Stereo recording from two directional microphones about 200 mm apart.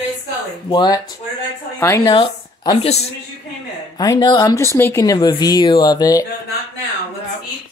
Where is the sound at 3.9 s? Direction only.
20° left (ahead or behind).